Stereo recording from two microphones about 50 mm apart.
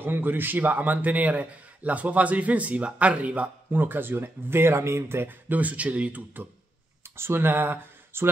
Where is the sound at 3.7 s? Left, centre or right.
Right.